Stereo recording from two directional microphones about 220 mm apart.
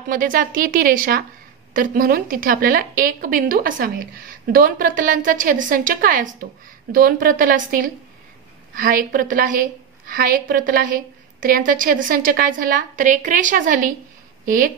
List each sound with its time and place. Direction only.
0.1 s a woman's voice: 40° right (ahead or behind)